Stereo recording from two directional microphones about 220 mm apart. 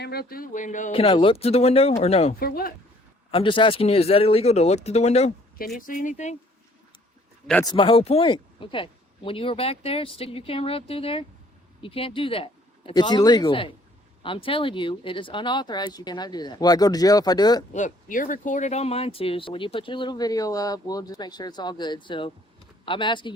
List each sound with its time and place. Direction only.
0.0 s speech: 45° left (ahead or behind); by 2.3 s 30° left (ahead or behind)
2.4 s speech: 45° left (ahead or behind)
3.3 s speech: 20° left (ahead or behind)
7.6 s speech: 20° left (ahead or behind)
17.7 s speech: 35° left (ahead or behind)